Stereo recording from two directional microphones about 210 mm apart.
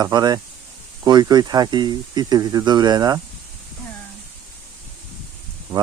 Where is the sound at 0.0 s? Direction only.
20° right (ahead or behind).